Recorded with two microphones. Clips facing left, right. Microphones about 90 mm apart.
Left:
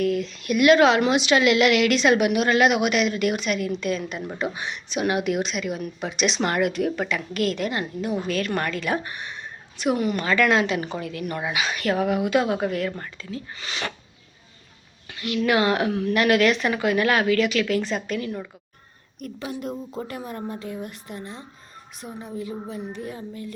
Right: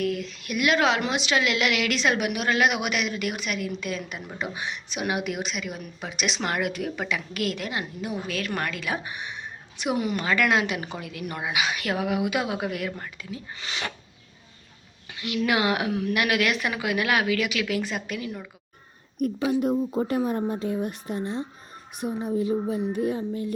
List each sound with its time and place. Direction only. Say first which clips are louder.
0.0 s a woman's voice: left 4 dB; 5° right (ahead or behind)
15.1 s a sound: left 3 dB; 20° right (ahead or behind)
15.4 s a woman's voice: left 3 dB; 15° right (ahead or behind)
19.5 s speech: right 7 dB; 20° right (ahead or behind)